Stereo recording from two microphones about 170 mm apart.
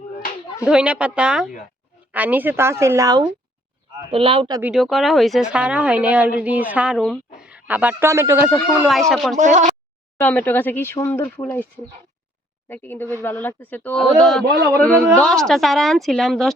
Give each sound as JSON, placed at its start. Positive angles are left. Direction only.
{"t": 0.6, "sound": "a woman's voice", "side_deg": -5}
{"t": 4.1, "sound": "speech", "side_deg": -35}
{"t": 4.6, "sound": "a woman's voice", "side_deg": 0}
{"t": 8.8, "sound": "a woman's voice", "side_deg": 0}
{"t": 9.4, "sound": "speech", "side_deg": -45}
{"t": 10.2, "sound": "a man's voice", "side_deg": 10}
{"t": 14.4, "sound": "a man's voice", "side_deg": -75}
{"t": 15.2, "sound": "a woman's voice", "side_deg": 5}